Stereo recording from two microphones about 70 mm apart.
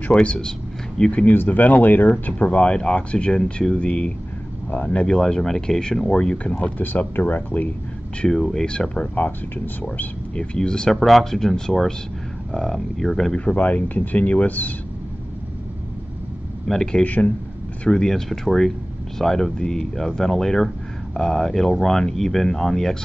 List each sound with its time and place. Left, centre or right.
0.1 s speech: centre
1.2 s speech: left
5.0 s speech: centre
6.8 s speech: left
8.2 s speech: centre
10.3 s speech: centre
11.0 s speech: centre
13.5 s speech: left
16.6 s speech: centre
17.0 s speech: left
17.8 s speech: centre